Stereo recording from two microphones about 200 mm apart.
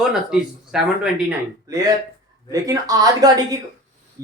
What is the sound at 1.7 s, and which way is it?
A man's voice, 15° right (ahead or behind).